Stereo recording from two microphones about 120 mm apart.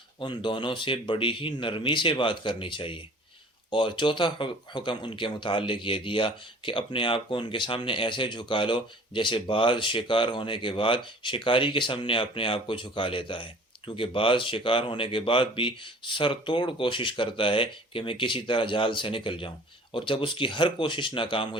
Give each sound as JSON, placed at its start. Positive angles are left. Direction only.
{"t": 0.2, "sound": "speech", "side_deg": 40}